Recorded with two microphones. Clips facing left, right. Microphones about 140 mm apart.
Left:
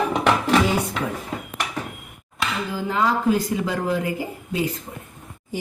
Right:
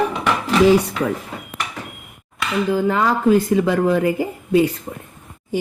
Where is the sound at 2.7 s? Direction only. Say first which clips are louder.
Right 3 dB; 55° right (ahead or behind).